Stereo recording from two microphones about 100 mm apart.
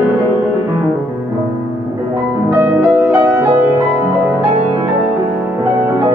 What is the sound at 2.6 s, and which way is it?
Music, 20° right (ahead or behind).